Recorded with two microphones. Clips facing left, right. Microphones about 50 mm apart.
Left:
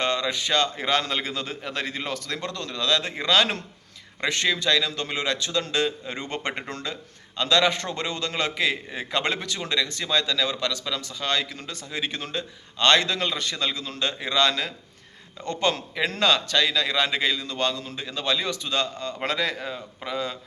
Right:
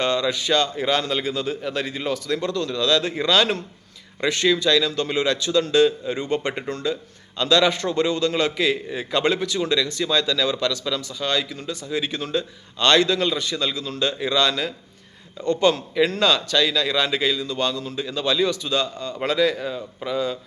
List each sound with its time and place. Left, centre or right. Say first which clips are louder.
0.0 s a man's voice: right 3 dB; left
6.1 s speech: right 6 dB; left
7.3 s a man's voice: right 3 dB; left
11.9 s a man's voice: right 5 dB; left